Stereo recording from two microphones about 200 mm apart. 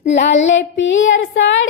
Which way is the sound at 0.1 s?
60° left (ahead or behind).